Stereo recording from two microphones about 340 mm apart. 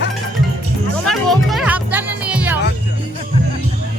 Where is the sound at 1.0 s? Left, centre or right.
Centre.